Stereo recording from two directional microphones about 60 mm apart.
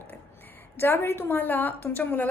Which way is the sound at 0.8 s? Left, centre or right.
Left.